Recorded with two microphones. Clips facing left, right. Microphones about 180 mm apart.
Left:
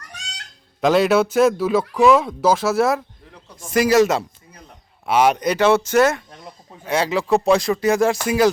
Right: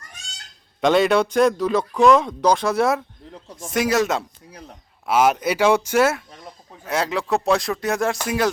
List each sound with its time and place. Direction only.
0.0 s goose: 70° left (ahead or behind)
0.8 s speech: centre (ahead or behind)